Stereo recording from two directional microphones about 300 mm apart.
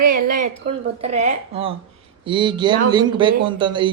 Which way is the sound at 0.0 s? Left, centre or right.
Right.